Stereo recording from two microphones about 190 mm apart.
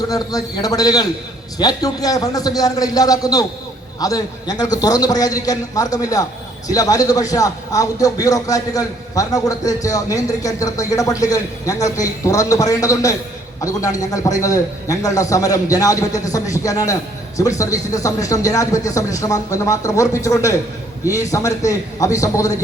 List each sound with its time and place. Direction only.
0.1 s a man's voice: 20° left (ahead or behind)